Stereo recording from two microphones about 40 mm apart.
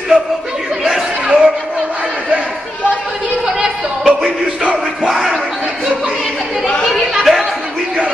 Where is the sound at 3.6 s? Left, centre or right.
Right.